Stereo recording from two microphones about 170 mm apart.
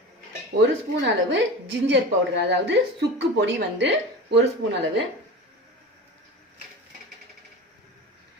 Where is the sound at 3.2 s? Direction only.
90° right.